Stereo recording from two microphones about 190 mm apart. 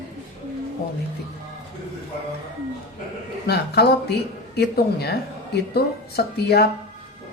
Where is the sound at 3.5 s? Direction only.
60° left (ahead or behind).